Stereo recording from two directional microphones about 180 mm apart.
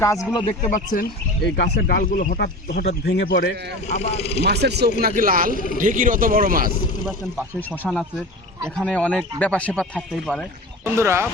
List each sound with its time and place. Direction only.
0.0 s speech: 15° left (ahead or behind)
0.6 s speech: 45° left (ahead or behind)
1.5 s speech: 65° left (ahead or behind)
3.8 s speech: 40° left (ahead or behind)
4.4 s speech: 65° right (ahead or behind); by 5.5 s 50° right (ahead or behind)
5.5 s speech: 50° left (ahead or behind)
5.8 s speech: 50° right (ahead or behind)
7.8 s speech: 5° left (ahead or behind)
10.8 s speech: 15° right (ahead or behind)